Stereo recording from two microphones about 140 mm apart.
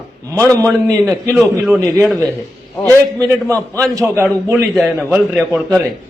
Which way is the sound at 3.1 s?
25° right (ahead or behind).